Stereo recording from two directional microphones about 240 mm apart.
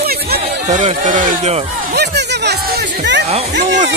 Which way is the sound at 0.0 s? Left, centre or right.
Right.